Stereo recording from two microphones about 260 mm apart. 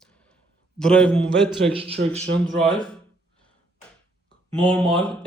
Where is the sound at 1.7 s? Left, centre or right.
Right.